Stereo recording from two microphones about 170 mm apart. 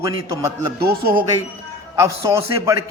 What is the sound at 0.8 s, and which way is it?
Speech, 65° right (ahead or behind).